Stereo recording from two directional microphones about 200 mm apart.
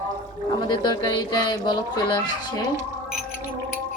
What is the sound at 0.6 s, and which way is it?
Speech, 20° left (ahead or behind).